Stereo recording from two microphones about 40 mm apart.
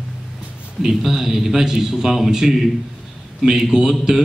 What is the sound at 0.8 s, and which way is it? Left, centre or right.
A man's voice, centre.